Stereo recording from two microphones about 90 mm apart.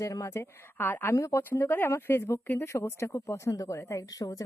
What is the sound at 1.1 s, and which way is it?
Speech, 35° left (ahead or behind).